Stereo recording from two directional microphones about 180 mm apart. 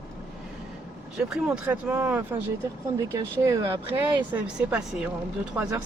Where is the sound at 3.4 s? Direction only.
20° right (ahead or behind).